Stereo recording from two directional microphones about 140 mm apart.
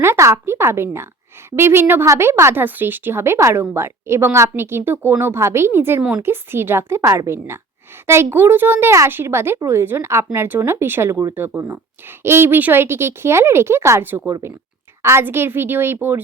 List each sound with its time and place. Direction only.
0.0 s a woman's voice: 20° right (ahead or behind)
6.0 s a woman's voice: 5° right (ahead or behind)
6.2 s a woman's voice: 15° right (ahead or behind)